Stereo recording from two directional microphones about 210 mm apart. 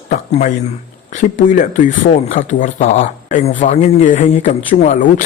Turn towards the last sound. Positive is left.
turn(degrees=35)  # may be behind; listen again after turning